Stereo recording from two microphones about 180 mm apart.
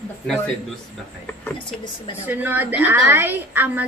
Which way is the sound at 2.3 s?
10° right (ahead or behind).